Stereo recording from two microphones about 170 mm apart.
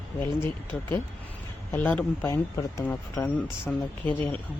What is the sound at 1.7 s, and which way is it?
Speech, 10° left (ahead or behind).